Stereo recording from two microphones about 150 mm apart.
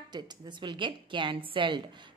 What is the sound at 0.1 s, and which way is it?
A woman's voice, 30° right (ahead or behind).